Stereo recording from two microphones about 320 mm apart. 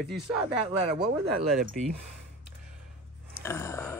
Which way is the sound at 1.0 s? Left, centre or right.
Right.